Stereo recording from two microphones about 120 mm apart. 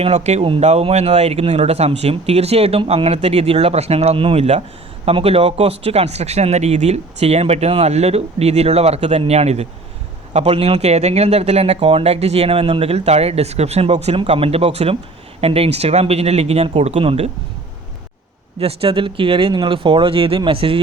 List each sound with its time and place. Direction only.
0.0 s speech: 65° right (ahead or behind)
14.2 s speech: 50° right (ahead or behind)
18.6 s speech: 50° right (ahead or behind)